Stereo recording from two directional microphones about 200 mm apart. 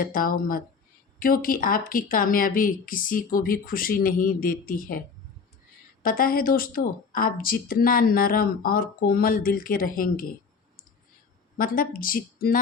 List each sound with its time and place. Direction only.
0.0 s speech: 45° left (ahead or behind)
11.5 s speech: 45° left (ahead or behind)